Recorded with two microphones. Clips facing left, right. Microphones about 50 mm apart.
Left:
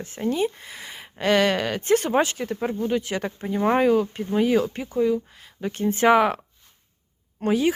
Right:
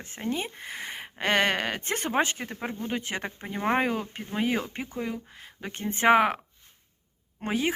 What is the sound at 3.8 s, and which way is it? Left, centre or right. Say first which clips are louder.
Speech: left 8 dB; right.